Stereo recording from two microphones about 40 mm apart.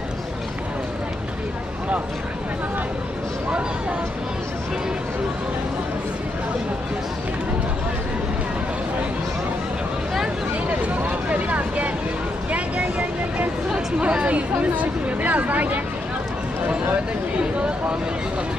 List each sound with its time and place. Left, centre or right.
10.7 s vehicle: right
13.7 s chatter: right
17.4 s speech: right